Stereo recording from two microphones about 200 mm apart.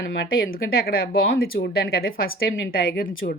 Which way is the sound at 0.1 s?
50° left (ahead or behind).